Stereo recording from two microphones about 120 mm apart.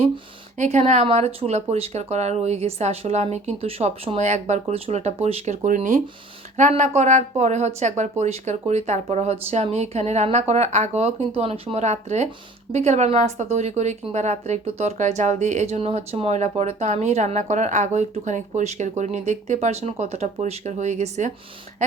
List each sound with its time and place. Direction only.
0.5 s a woman's voice: 80° right
1.1 s speech: 60° right (ahead or behind)
4.2 s a woman's voice: 75° right (ahead or behind)
7.8 s speech: 80° right
8.2 s a woman's voice: 65° right (ahead or behind); by 21.3 s 80° right